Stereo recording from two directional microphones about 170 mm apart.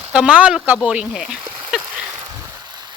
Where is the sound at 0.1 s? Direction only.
5° right (ahead or behind).